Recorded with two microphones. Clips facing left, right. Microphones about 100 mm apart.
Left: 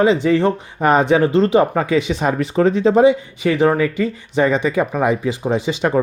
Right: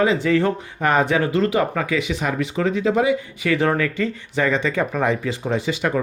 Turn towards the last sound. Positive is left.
turn(degrees=25)  # may be behind; listen again after turning